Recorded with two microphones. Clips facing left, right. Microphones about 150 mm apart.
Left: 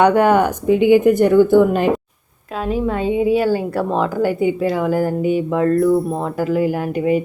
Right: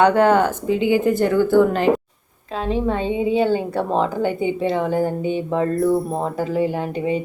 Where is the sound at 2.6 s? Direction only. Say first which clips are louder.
Left 1 dB; 25° right (ahead or behind).